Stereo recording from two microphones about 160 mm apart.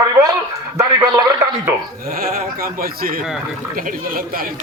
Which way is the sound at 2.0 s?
65° right (ahead or behind).